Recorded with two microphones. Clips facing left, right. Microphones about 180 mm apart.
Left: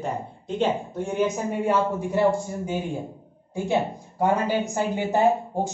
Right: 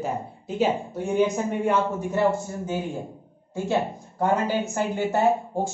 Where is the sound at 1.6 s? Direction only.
15° left (ahead or behind).